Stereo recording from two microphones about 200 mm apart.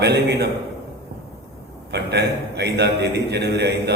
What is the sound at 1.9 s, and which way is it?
A man's voice, 55° right (ahead or behind).